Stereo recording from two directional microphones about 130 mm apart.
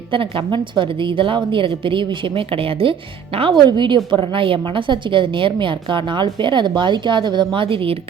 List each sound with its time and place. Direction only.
0.1 s a woman's voice: 40° right (ahead or behind)